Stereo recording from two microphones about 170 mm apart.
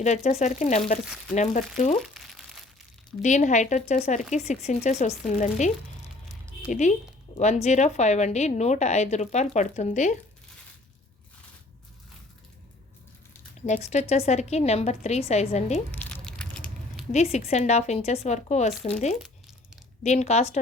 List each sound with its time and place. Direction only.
0.0 s speech: 40° left (ahead or behind)
2.0 s a sound: centre (ahead or behind)
3.2 s speech: 45° left (ahead or behind)
13.7 s speech: 45° left (ahead or behind)
15.9 s a sound: 5° left (ahead or behind)
17.1 s speech: 40° left (ahead or behind)